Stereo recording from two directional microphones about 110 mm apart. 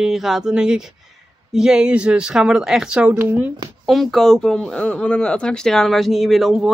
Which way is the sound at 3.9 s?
Centre (ahead or behind).